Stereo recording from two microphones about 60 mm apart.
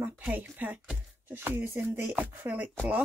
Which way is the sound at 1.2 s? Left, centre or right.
Right.